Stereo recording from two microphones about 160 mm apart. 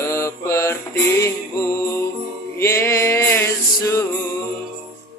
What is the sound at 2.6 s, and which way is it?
Music, 15° left (ahead or behind).